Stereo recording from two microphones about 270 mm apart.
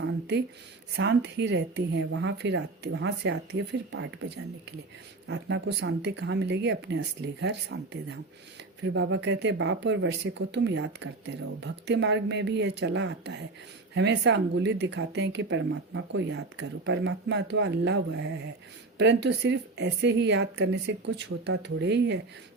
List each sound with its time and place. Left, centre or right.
0.0 s a sound: right
0.9 s speech: right
5.3 s speech: right